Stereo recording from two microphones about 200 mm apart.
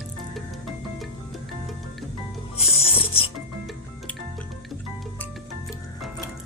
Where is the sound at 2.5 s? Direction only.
30° left (ahead or behind).